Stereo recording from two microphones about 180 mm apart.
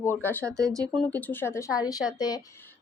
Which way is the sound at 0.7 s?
20° right (ahead or behind).